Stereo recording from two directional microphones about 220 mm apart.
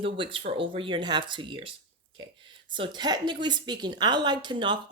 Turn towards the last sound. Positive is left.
turn(degrees=-20)  # may be behind; listen again after turning